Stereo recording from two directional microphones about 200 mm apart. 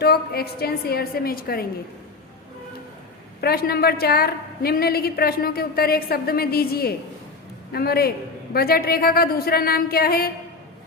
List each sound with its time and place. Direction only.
0.0 s a woman's voice: 50° left (ahead or behind)
3.4 s a woman's voice: 50° left (ahead or behind)